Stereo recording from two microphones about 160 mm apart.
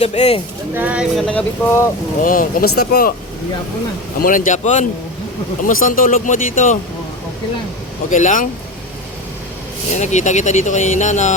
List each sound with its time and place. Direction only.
0.0 s speech: 40° left (ahead or behind)
0.8 s speech: 10° right (ahead or behind)
1.3 s speech: 10° left (ahead or behind)
2.2 s speech: 60° left (ahead or behind)
4.2 s speech: 55° left (ahead or behind)
8.1 s speech: 50° left (ahead or behind)
9.9 s speech: 45° left (ahead or behind)